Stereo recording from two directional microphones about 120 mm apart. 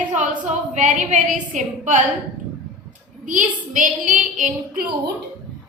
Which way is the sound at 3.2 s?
90° right.